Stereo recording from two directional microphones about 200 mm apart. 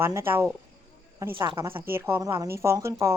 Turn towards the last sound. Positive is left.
turn(degrees=-15)  # may be behind; listen again after turning